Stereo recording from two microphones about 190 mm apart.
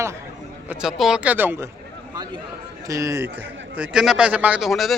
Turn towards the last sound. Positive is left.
turn(degrees=0)  # may be behind; listen again after turning